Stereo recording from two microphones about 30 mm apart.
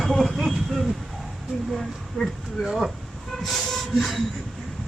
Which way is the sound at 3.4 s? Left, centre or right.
Centre.